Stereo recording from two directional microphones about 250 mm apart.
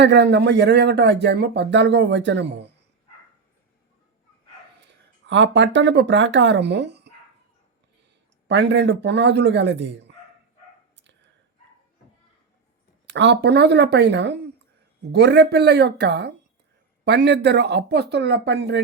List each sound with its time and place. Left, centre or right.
0.0 s speech: right
4.8 s speech: right
8.4 s speech: right
10.9 s whispering: right
13.1 s speech: right